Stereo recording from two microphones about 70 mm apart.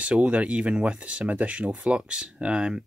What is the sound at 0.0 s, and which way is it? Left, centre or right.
Speech, centre.